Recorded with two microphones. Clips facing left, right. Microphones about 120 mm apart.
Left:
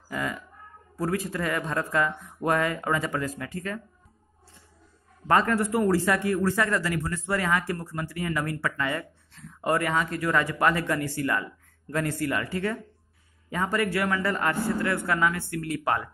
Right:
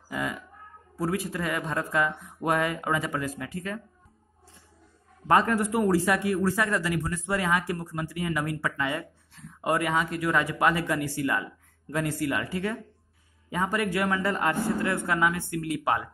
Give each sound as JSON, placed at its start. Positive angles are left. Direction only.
{"t": 0.1, "sound": "cat", "side_deg": -15}
{"t": 0.9, "sound": "speech", "side_deg": -10}
{"t": 5.3, "sound": "speech", "side_deg": -15}